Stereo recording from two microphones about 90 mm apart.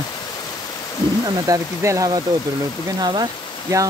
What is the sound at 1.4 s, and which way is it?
Speech, 35° right (ahead or behind).